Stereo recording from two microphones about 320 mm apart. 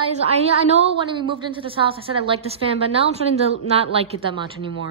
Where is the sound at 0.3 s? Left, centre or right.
Centre.